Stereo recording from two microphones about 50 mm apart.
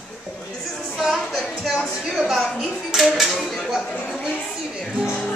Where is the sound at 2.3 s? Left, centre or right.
Centre.